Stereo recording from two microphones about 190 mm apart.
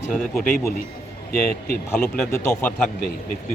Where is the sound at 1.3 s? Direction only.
50° left (ahead or behind).